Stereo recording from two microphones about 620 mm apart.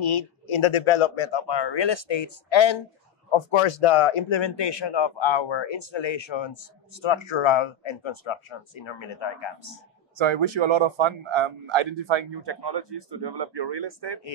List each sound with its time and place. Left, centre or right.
0.0 s speech: left
10.1 s a man's voice: right